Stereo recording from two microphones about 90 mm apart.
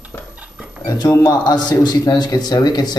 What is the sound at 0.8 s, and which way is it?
Speech, 40° left (ahead or behind).